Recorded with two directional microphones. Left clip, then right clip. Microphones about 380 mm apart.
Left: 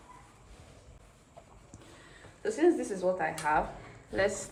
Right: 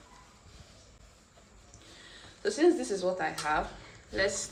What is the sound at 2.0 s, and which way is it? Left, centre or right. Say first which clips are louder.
Speech: right 2 dB; centre.